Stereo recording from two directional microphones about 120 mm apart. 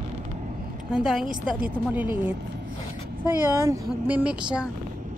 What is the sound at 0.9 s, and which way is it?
A woman's voice, 5° right (ahead or behind).